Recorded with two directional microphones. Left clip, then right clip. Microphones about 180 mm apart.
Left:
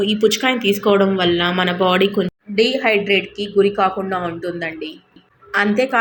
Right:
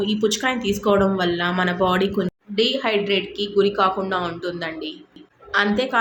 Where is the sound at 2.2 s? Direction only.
15° left (ahead or behind).